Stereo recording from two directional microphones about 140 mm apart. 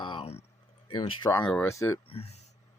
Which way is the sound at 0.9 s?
35° left (ahead or behind).